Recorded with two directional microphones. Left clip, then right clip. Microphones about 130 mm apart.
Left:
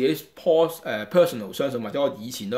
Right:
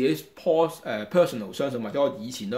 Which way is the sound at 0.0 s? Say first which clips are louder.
Left 2 dB; 25° left (ahead or behind).